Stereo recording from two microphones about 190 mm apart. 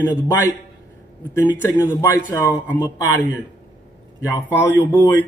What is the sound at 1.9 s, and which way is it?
Speech, 15° left (ahead or behind).